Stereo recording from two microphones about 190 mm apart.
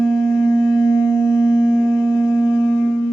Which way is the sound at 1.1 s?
15° left (ahead or behind).